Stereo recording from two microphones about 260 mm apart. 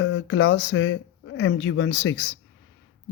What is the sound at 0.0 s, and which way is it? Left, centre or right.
Speech, left.